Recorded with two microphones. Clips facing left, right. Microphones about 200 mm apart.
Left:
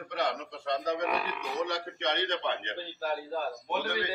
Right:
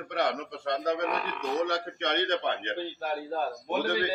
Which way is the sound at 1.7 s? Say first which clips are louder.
Right 2 dB; 55° right (ahead or behind).